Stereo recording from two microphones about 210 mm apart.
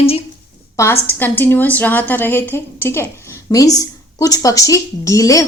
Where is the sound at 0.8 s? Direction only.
10° left (ahead or behind).